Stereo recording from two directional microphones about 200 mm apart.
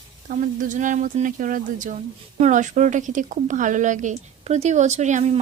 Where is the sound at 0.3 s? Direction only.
40° right (ahead or behind).